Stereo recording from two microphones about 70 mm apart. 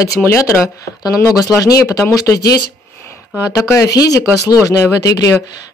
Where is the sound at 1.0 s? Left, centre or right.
Left.